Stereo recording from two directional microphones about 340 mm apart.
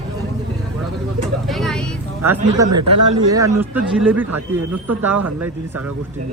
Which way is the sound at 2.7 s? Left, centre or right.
Right.